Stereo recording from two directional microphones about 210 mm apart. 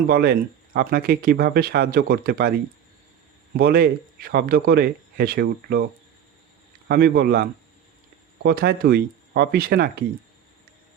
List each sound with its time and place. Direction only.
0.1 s speech: 50° right (ahead or behind)
3.6 s speech: 45° right (ahead or behind)
6.8 s speech: 45° right (ahead or behind)
8.4 s speech: 45° right (ahead or behind)